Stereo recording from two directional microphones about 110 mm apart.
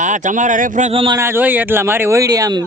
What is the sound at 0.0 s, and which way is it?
Speech, 90° right.